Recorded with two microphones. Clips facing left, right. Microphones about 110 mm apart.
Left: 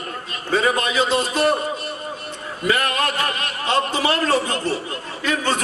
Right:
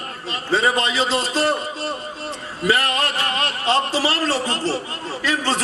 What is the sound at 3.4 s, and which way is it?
A man's voice, 30° right (ahead or behind).